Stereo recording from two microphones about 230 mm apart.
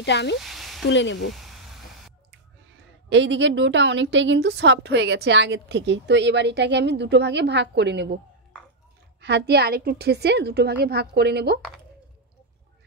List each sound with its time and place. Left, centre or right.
0.0 s speech: left
0.4 s a sound: centre
0.8 s speech: left
1.2 s a sound: centre
3.1 s a woman's voice: right
9.2 s a woman's voice: right